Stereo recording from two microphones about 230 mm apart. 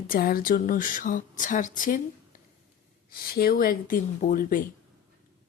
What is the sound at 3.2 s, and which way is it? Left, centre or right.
Speech, left.